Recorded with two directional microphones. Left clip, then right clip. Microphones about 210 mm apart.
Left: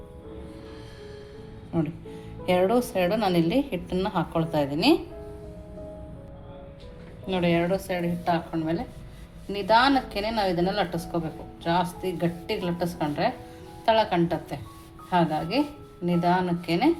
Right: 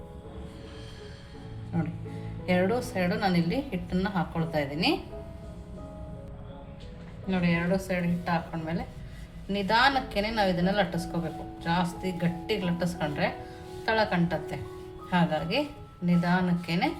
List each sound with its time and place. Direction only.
2.5 s a woman's voice: 30° left (ahead or behind)
7.4 s a woman's voice: 35° left (ahead or behind)